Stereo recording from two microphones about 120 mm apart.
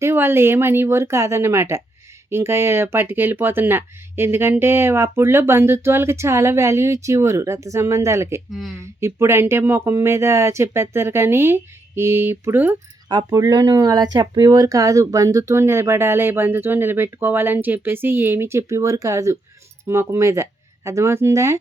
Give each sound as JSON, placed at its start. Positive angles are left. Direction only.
{"t": 0.0, "sound": "speech", "side_deg": -20}
{"t": 8.4, "sound": "speech", "side_deg": 0}
{"t": 8.7, "sound": "speech", "side_deg": -20}
{"t": 13.1, "sound": "speech", "side_deg": -35}